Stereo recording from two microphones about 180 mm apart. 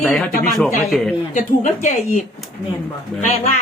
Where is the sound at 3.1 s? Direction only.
5° left (ahead or behind).